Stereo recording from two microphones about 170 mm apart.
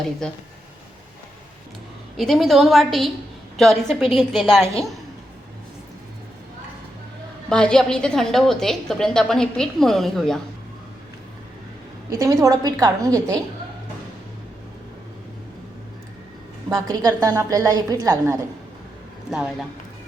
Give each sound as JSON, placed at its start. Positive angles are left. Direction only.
{"t": 0.2, "sound": "a woman's voice", "side_deg": 5}
{"t": 2.1, "sound": "a woman's voice", "side_deg": 0}
{"t": 7.5, "sound": "a woman's voice", "side_deg": 5}
{"t": 12.1, "sound": "a woman's voice", "side_deg": -20}
{"t": 16.6, "sound": "a woman's voice", "side_deg": -20}
{"t": 19.3, "sound": "a woman's voice", "side_deg": -5}